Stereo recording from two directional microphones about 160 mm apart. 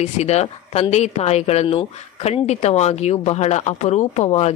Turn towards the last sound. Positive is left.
turn(degrees=40)  # may be behind; listen again after turning